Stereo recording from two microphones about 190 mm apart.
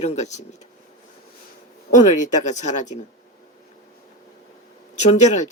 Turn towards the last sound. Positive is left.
turn(degrees=40)  # may be behind; listen again after turning